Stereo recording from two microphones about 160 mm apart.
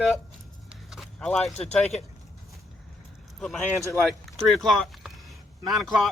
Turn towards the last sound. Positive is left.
turn(degrees=0)  # may be behind; listen again after turning